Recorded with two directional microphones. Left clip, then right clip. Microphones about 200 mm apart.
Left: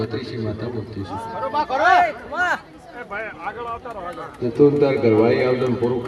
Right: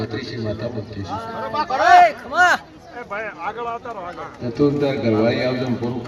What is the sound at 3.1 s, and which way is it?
Speech, 5° right (ahead or behind).